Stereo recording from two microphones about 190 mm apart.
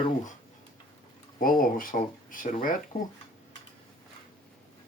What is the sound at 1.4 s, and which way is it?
Speech, 45° left (ahead or behind).